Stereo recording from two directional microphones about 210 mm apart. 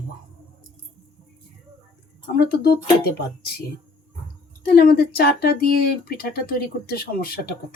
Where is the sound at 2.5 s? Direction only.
50° left (ahead or behind).